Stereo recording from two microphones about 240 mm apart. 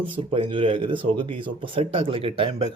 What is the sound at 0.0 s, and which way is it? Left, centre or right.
Speech, right.